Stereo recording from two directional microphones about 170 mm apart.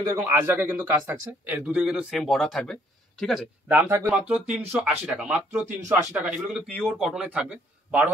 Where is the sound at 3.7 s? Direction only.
15° right (ahead or behind).